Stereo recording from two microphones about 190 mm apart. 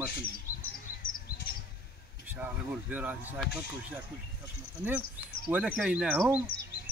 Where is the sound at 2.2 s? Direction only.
10° right (ahead or behind).